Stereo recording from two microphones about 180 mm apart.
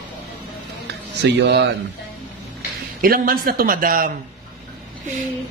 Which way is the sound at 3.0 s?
55° right (ahead or behind).